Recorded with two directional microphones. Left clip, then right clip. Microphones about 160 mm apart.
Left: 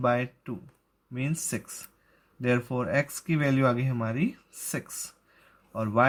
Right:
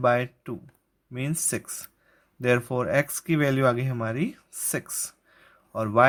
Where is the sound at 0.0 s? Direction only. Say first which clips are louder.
Right 4 dB; 35° right (ahead or behind).